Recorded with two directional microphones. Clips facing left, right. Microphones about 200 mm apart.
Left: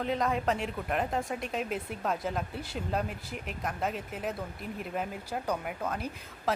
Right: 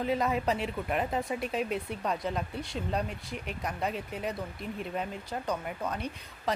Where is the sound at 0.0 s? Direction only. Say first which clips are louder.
Right 1 dB; 5° right (ahead or behind).